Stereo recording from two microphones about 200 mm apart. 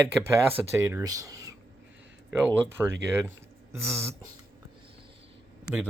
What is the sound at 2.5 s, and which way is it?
Speech, 10° right (ahead or behind).